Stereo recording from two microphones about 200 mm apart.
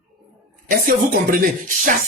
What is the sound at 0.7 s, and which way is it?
Speech, 45° right (ahead or behind).